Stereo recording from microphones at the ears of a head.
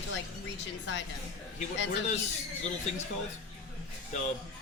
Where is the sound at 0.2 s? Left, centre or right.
Left.